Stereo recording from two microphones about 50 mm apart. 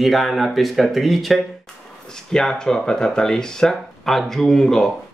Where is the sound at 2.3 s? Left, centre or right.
Centre.